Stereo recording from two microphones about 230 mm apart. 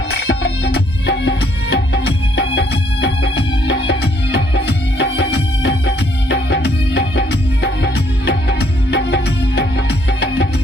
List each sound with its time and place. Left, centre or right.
0.1 s music: left